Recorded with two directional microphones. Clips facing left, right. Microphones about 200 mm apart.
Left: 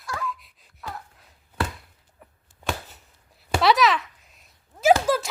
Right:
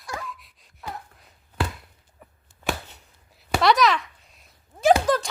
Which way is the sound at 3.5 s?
Centre (ahead or behind).